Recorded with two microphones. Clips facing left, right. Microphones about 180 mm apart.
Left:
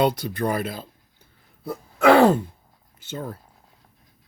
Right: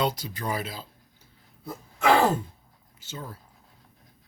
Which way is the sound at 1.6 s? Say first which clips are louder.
Left 6 dB; 70° left (ahead or behind).